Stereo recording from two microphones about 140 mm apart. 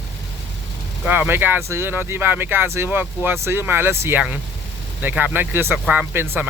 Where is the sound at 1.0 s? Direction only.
10° right (ahead or behind).